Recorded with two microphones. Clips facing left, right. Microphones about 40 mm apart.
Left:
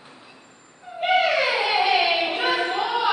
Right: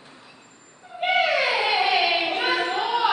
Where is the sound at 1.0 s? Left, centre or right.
Centre.